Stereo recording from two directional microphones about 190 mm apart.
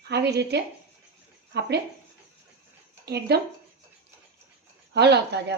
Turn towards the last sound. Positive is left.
turn(degrees=-60)  # may be behind; listen again after turning